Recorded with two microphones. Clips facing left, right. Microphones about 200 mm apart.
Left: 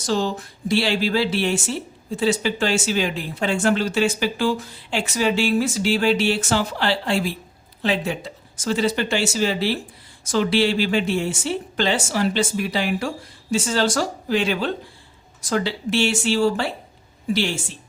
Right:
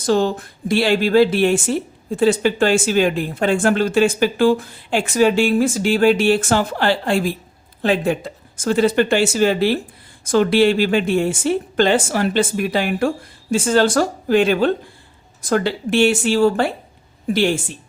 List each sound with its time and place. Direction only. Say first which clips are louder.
0.0 s speech: right 5 dB; 55° right (ahead or behind)